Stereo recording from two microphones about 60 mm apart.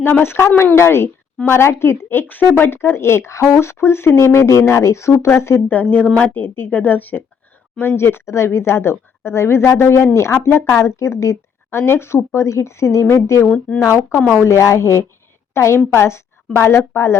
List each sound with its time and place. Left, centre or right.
0.0 s a woman's voice: left
5.6 s speech: left
7.8 s a woman's voice: left